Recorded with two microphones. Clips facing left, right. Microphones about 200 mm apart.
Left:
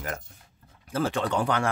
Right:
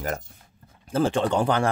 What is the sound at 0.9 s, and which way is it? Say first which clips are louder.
Speech: right 4 dB; 30° right (ahead or behind).